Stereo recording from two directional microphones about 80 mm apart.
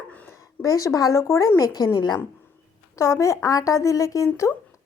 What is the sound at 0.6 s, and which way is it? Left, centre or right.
Speech, left.